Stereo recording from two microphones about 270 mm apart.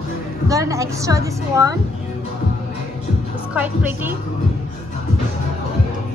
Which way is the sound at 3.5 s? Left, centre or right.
Centre.